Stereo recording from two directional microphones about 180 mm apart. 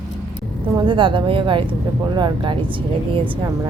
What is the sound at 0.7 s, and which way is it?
Speech, 25° right (ahead or behind).